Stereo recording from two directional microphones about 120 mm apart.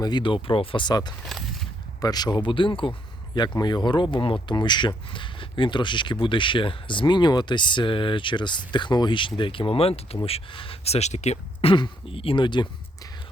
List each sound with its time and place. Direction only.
0.0 s speech: 40° left (ahead or behind)
1.3 s a sound: centre (ahead or behind)
2.0 s speech: 35° left (ahead or behind); by 11.7 s 70° left (ahead or behind)
11.7 s speech: 45° left (ahead or behind)